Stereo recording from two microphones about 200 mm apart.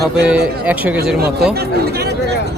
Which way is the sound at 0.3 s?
5° right (ahead or behind).